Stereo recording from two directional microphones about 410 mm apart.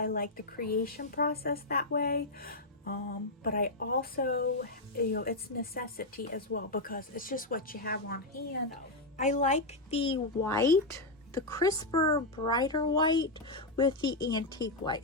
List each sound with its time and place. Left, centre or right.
0.0 s a woman's voice: left